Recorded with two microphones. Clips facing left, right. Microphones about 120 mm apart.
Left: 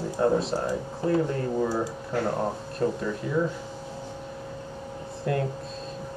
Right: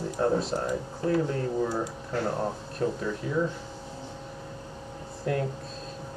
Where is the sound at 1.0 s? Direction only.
20° left (ahead or behind).